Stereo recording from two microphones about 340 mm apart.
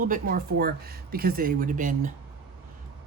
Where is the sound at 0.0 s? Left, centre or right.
Right.